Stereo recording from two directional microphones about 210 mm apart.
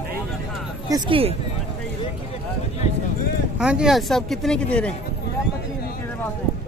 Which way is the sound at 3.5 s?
5° right (ahead or behind).